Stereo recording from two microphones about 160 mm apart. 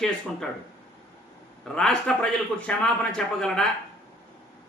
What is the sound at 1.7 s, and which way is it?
Speech, 5° left (ahead or behind).